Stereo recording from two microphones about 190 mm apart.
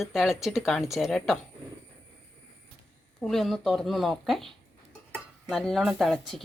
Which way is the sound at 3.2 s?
Centre (ahead or behind).